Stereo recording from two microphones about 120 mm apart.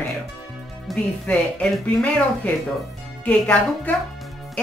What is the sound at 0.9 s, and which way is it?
Speech, 5° left (ahead or behind).